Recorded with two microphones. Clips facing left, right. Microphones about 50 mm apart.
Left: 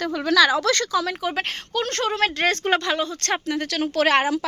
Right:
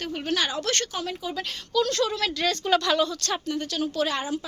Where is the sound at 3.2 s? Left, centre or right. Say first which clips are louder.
Left 4 dB; left.